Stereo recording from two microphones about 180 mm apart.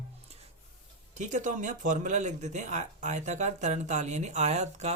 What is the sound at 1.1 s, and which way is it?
Speech, 45° right (ahead or behind).